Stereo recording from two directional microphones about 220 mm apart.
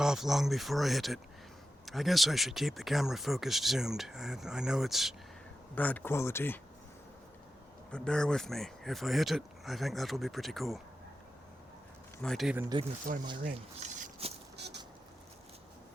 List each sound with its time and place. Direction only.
0.0 s speech: centre (ahead or behind)
7.9 s speech: 5° left (ahead or behind)
12.2 s speech: centre (ahead or behind)
12.5 s speech: 15° right (ahead or behind)
13.1 s speech: 35° right (ahead or behind)
13.4 s a sound: 35° right (ahead or behind)
14.5 s a sound: 50° right (ahead or behind)